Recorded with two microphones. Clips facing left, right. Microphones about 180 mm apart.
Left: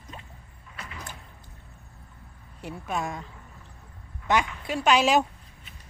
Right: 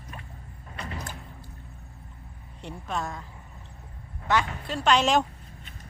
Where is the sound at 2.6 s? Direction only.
10° left (ahead or behind).